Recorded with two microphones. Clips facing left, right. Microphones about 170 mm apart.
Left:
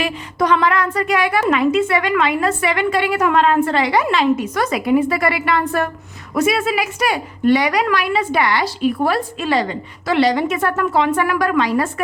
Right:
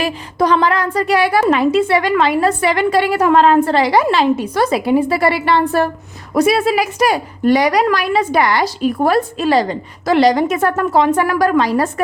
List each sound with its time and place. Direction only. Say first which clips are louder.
0.0 s a woman's voice: right 3 dB; 35° right (ahead or behind)